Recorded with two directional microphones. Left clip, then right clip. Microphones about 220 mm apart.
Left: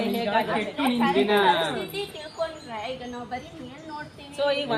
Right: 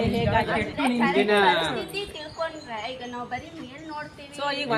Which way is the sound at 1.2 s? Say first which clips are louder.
Right 1 dB; 55° right (ahead or behind).